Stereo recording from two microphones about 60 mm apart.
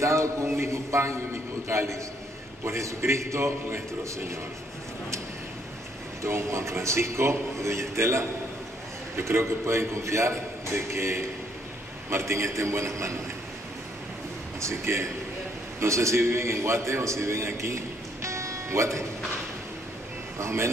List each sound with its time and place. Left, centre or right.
0.0 s a sound: right
1.7 s a man's voice: right
6.2 s a man's voice: right
14.6 s a man's voice: right
20.3 s a man's voice: right